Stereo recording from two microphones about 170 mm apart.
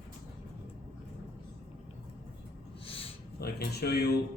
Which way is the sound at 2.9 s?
35° left (ahead or behind).